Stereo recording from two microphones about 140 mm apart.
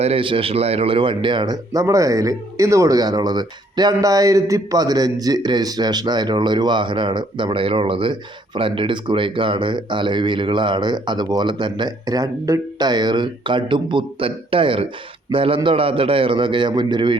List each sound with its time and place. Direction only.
0.0 s speech: 40° right (ahead or behind)